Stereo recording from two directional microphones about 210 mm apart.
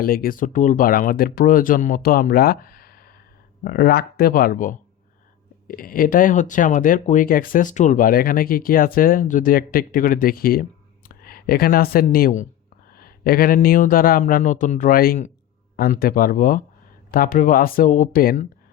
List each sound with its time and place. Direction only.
0.0 s speech: 45° left (ahead or behind)